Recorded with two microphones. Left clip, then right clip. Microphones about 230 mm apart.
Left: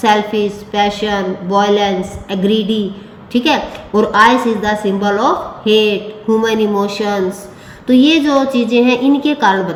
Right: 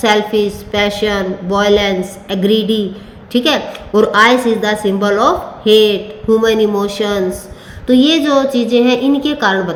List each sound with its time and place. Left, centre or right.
0.0 s a woman's voice: right